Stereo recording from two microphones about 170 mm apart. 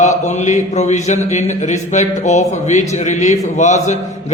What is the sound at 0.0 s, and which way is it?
A man's voice, 45° left (ahead or behind).